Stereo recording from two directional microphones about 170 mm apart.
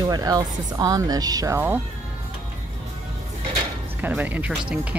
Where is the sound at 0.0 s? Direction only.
20° right (ahead or behind).